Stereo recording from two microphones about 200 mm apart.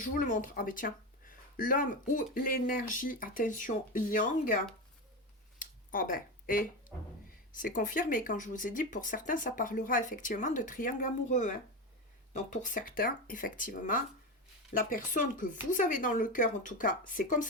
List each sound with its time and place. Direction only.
0.0 s speech: 40° left (ahead or behind)
5.5 s a sound: 45° left (ahead or behind)
7.5 s speech: 40° left (ahead or behind)